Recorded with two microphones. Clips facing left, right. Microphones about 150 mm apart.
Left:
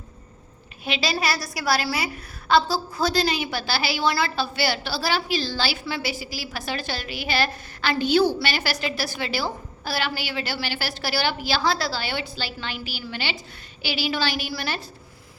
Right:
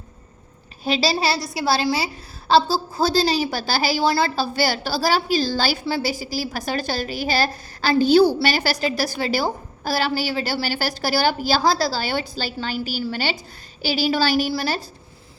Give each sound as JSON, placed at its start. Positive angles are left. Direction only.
{"t": 0.9, "sound": "a woman's voice", "side_deg": -35}
{"t": 1.1, "sound": "a woman's voice", "side_deg": -25}